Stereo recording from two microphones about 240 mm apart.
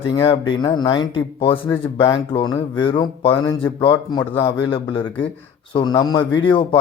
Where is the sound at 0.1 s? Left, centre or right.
Centre.